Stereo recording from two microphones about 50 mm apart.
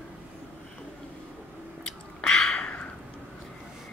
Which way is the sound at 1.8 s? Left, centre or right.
Centre.